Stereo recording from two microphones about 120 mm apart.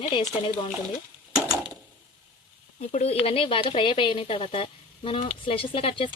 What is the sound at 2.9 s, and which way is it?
Speech, 60° left (ahead or behind).